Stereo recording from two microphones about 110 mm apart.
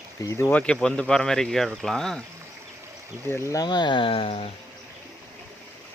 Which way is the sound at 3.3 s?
25° left (ahead or behind).